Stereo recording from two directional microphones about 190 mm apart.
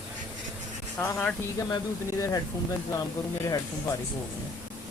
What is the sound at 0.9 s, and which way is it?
Speech, 5° left (ahead or behind).